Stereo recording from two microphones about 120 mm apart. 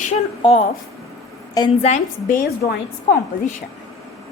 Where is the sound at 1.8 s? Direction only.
70° left (ahead or behind).